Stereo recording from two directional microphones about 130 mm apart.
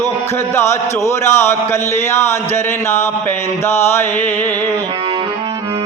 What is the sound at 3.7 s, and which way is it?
Music, 20° left (ahead or behind).